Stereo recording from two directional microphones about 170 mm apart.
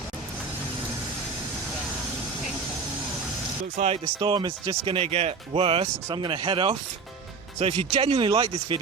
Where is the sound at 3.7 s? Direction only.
40° right (ahead or behind).